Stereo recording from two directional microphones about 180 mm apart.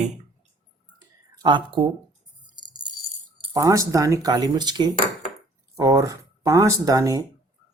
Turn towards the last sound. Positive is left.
turn(degrees=-20)  # may be behind; listen again after turning